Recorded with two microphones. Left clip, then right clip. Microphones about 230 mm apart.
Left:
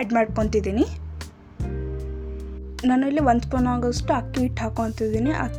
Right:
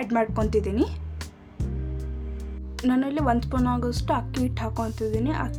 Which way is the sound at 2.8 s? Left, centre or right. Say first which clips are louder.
Left 4 dB; centre.